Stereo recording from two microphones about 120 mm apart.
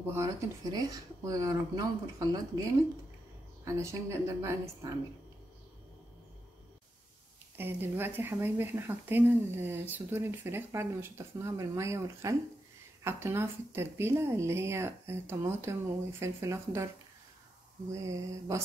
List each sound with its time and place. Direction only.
0.0 s speech: 20° right (ahead or behind)
7.5 s speech: 20° right (ahead or behind)
17.9 s speech: 25° right (ahead or behind)